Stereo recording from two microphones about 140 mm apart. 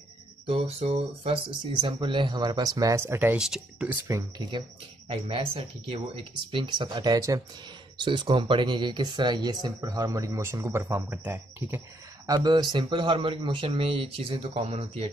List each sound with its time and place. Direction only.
0.5 s speech: 45° right (ahead or behind); by 3.4 s 15° right (ahead or behind)
3.4 s speech: 5° right (ahead or behind)
4.5 s speech: 35° right (ahead or behind); by 11.8 s 15° right (ahead or behind)
12.3 s speech: 30° right (ahead or behind); by 15.0 s 45° right (ahead or behind)